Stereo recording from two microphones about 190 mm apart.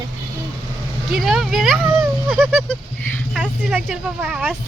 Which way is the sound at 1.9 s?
10° right (ahead or behind).